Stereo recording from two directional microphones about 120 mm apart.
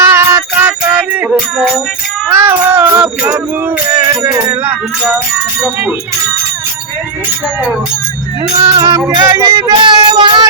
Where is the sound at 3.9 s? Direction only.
30° right (ahead or behind).